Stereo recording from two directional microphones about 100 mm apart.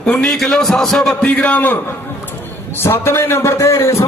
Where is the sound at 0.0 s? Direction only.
5° left (ahead or behind).